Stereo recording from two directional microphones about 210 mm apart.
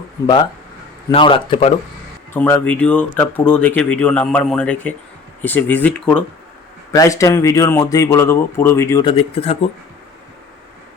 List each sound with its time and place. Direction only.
1.1 s speech: 25° left (ahead or behind)
2.3 s speech: 10° left (ahead or behind)
9.0 s speech: 30° left (ahead or behind)